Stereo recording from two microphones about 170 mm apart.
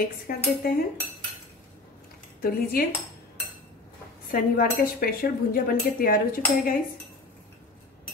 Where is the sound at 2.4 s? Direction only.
60° left (ahead or behind).